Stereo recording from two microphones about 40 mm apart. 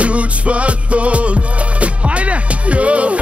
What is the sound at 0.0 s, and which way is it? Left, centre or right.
Music, right.